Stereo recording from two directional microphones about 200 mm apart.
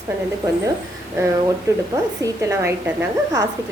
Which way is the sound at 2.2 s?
15° right (ahead or behind).